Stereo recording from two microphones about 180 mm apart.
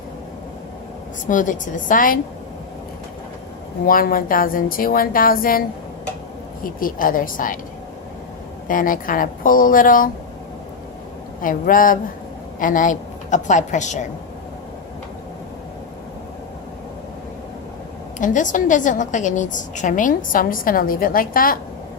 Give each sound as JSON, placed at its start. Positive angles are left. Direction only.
{"t": 1.3, "sound": "a woman's voice", "side_deg": 45}
{"t": 3.8, "sound": "a woman's voice", "side_deg": 50}
{"t": 8.6, "sound": "a woman's voice", "side_deg": 50}
{"t": 11.4, "sound": "a woman's voice", "side_deg": 50}
{"t": 18.2, "sound": "a woman's voice", "side_deg": 45}